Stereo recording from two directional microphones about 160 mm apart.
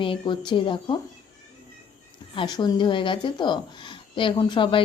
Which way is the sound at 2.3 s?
25° left (ahead or behind).